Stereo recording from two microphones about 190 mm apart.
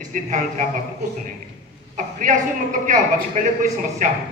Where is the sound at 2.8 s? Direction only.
45° right (ahead or behind).